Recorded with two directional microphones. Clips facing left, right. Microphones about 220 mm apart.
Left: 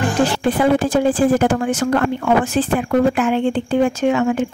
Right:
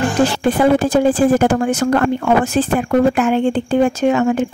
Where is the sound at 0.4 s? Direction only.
45° right (ahead or behind).